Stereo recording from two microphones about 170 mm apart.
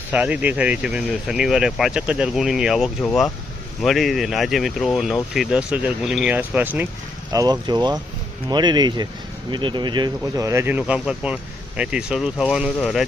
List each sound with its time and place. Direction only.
0.1 s speech: 10° right (ahead or behind)
7.3 s speech: 25° right (ahead or behind); by 13.1 s centre (ahead or behind)